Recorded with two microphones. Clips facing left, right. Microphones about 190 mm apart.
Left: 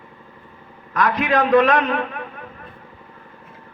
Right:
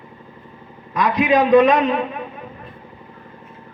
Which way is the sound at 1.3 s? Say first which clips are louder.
Right 3 dB; 20° right (ahead or behind).